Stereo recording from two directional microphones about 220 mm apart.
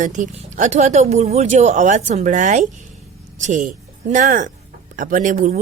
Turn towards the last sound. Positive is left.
turn(degrees=-35)  # may be behind; listen again after turning